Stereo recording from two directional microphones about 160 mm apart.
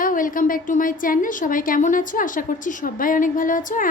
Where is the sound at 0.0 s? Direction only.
60° left (ahead or behind).